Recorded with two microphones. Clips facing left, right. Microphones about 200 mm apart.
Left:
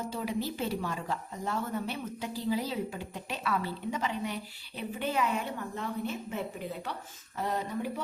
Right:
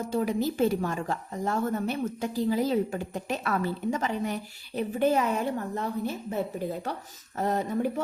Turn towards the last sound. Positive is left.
turn(degrees=-45)  # may be behind; listen again after turning